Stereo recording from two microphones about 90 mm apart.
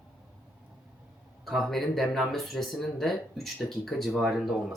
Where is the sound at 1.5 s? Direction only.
Centre (ahead or behind).